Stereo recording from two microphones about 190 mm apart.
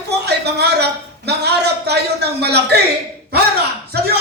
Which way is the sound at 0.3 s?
60° right (ahead or behind).